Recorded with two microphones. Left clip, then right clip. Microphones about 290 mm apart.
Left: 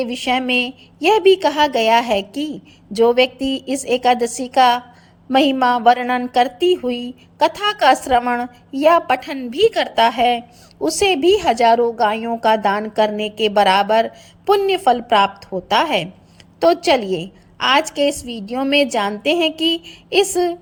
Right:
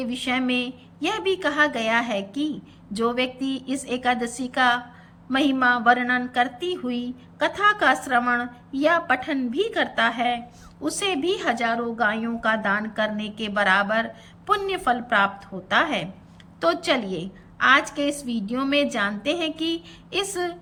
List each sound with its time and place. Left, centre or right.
0.0 s a woman's voice: centre